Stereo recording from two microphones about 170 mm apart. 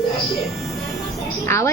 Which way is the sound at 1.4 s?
15° left (ahead or behind).